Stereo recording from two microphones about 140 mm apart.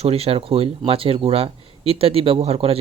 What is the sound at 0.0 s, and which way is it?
Speech, 45° right (ahead or behind).